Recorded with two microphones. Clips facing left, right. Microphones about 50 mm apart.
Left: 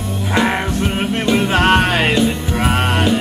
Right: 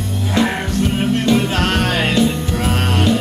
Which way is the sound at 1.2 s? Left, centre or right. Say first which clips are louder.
Left 6 dB; left.